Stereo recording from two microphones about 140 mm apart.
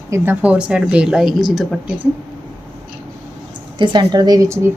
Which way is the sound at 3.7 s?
35° right (ahead or behind).